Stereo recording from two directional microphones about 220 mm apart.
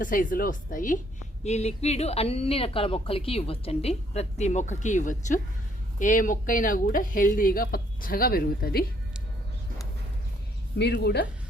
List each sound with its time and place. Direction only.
0.0 s a woman's voice: 40° left (ahead or behind)
10.8 s speech: 50° left (ahead or behind)